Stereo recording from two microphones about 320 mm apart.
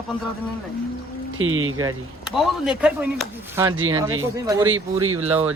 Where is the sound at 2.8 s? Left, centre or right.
Centre.